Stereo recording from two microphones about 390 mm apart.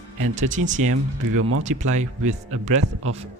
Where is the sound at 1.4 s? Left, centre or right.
Right.